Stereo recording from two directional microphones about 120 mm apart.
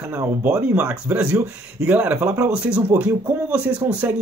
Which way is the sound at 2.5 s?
5° right (ahead or behind).